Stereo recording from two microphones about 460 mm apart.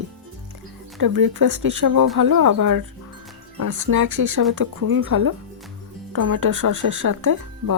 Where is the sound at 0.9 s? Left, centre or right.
Right.